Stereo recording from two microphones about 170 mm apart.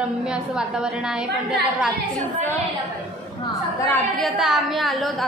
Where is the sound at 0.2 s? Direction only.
5° right (ahead or behind).